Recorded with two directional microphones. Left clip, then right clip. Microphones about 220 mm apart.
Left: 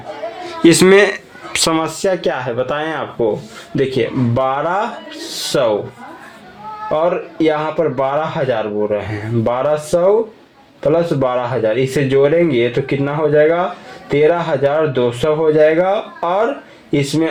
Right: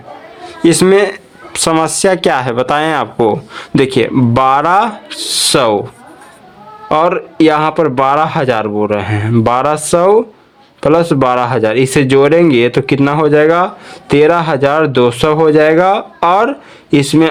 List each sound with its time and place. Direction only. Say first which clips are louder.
0.4 s a woman's voice: right 1 dB; 15° right (ahead or behind)
2.0 s speech: right 6 dB; 40° right (ahead or behind)
6.8 s speech: right 5 dB; 45° right (ahead or behind)